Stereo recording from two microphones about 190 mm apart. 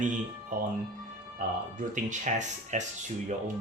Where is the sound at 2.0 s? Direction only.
40° right (ahead or behind).